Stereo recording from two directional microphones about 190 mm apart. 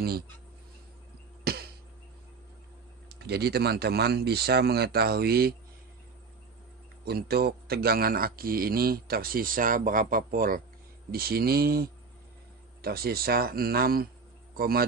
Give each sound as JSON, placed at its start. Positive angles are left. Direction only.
{"t": 1.4, "sound": "a sound", "side_deg": -55}
{"t": 3.1, "sound": "speech", "side_deg": -60}
{"t": 7.1, "sound": "speech", "side_deg": -55}